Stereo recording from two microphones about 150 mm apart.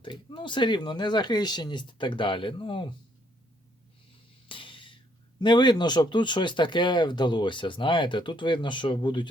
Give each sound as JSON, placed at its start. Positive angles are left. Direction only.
{"t": 0.0, "sound": "speech", "side_deg": 35}
{"t": 4.4, "sound": "a sound", "side_deg": 35}
{"t": 5.4, "sound": "speech", "side_deg": 30}